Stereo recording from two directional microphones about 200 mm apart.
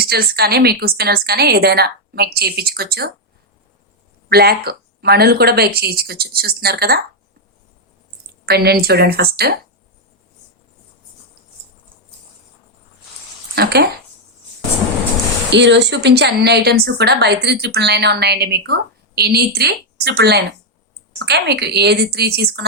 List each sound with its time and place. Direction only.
0.0 s a woman's voice: 50° right (ahead or behind)
4.3 s a woman's voice: 50° right (ahead or behind)
8.4 s a woman's voice: 50° right (ahead or behind)
13.6 s a woman's voice: 50° right (ahead or behind)
15.4 s a woman's voice: 60° right (ahead or behind)